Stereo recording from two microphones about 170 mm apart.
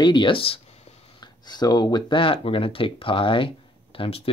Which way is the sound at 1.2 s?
25° left (ahead or behind).